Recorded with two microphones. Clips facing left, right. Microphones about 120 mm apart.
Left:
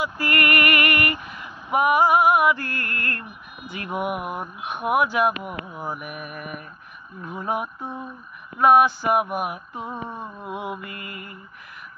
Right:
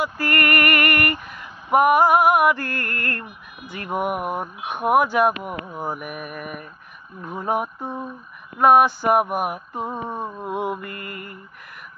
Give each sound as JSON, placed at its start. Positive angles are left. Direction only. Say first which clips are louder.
{"t": 0.0, "sound": "female singing", "louder": "right 1 dB", "side_deg": -45}
{"t": 3.7, "sound": "speech", "louder": "right 2 dB", "side_deg": -45}